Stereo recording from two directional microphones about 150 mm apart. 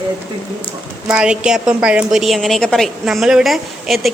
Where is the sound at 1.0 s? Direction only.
5° right (ahead or behind).